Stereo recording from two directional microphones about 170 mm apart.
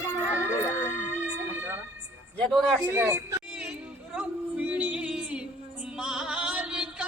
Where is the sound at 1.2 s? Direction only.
10° right (ahead or behind).